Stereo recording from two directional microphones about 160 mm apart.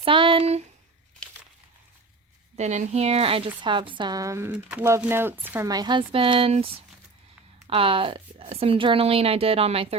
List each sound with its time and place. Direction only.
0.0 s a sound: 30° right (ahead or behind)
2.6 s a woman's voice: 45° right (ahead or behind)
7.7 s a woman's voice: 35° right (ahead or behind)